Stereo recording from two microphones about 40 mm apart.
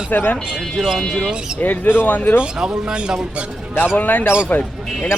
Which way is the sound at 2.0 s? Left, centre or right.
Left.